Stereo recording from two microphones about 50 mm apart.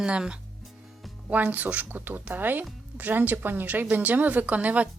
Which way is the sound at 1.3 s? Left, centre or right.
Right.